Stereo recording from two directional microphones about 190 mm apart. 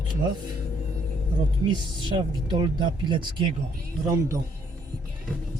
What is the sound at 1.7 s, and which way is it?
Speech, 25° right (ahead or behind).